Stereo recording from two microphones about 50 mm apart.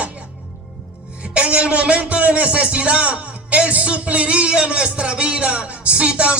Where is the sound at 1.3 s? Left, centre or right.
Right.